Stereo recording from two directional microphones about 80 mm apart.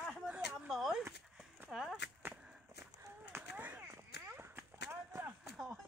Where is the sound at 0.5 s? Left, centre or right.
Centre.